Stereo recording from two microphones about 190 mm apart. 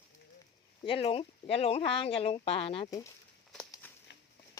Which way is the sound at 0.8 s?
30° left (ahead or behind).